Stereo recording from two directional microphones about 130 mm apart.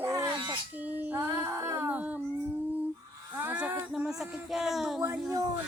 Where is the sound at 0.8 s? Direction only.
10° right (ahead or behind).